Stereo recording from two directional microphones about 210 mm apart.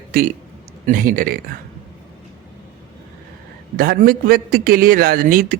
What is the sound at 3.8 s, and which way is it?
A man's voice, 45° right (ahead or behind).